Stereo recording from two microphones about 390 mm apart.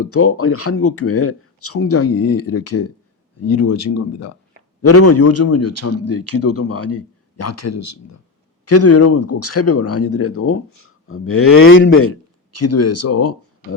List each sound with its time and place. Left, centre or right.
0.0 s speech: left